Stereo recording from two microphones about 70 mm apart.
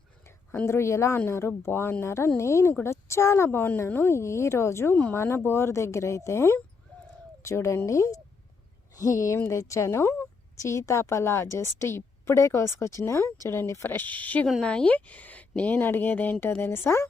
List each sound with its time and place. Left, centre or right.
0.6 s a woman's voice: left
16.6 s speech: left